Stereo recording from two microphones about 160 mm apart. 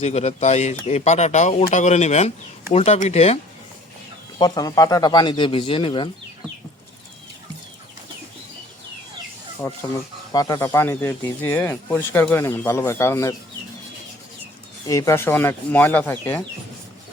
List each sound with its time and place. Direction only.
0.0 s speech: 40° left (ahead or behind)
4.4 s speech: 25° left (ahead or behind)
9.6 s speech: 15° left (ahead or behind)
10.7 s speech: 15° left (ahead or behind)
14.8 s speech: 20° left (ahead or behind)